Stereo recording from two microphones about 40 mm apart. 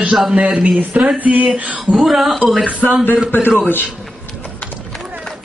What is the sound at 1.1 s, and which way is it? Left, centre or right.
Speech, right.